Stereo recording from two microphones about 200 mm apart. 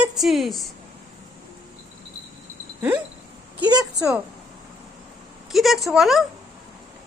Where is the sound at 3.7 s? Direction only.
15° right (ahead or behind).